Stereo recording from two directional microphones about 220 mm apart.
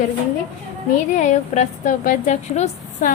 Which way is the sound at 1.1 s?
35° left (ahead or behind).